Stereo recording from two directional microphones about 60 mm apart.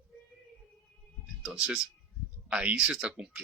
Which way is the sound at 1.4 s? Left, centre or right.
Centre.